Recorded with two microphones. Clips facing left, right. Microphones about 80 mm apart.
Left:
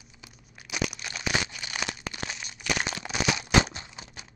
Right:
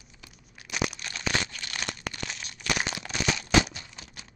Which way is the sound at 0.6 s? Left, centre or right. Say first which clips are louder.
Right 1 dB; centre.